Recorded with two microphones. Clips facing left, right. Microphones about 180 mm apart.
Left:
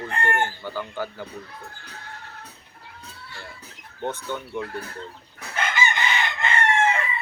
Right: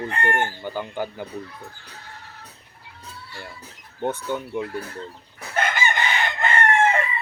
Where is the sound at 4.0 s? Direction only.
10° right (ahead or behind).